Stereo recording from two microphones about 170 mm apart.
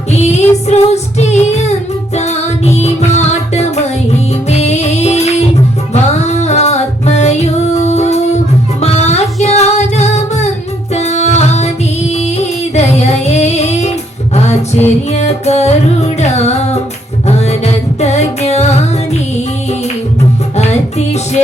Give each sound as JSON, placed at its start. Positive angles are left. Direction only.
{"t": 0.1, "sound": "child singing", "side_deg": 40}
{"t": 2.1, "sound": "music", "side_deg": 40}
{"t": 12.7, "sound": "music", "side_deg": 40}